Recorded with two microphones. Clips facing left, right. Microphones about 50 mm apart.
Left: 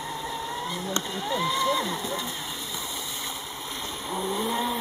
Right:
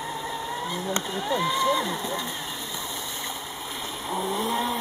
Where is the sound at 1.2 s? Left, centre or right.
Centre.